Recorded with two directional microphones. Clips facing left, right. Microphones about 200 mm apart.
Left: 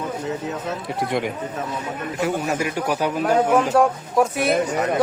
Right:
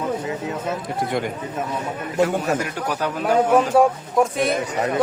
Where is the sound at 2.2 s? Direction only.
10° left (ahead or behind).